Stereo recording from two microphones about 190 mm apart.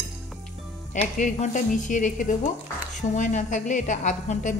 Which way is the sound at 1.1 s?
40° left (ahead or behind).